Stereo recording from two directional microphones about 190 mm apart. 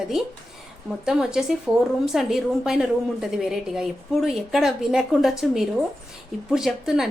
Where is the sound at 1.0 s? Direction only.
5° right (ahead or behind).